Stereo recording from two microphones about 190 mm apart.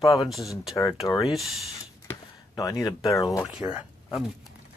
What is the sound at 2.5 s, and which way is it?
Speech, 20° left (ahead or behind).